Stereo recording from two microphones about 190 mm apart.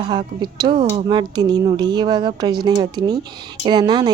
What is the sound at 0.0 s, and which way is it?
A woman's voice, 25° right (ahead or behind).